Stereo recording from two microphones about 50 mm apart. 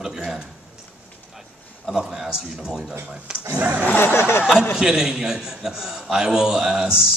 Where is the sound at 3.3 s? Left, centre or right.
Centre.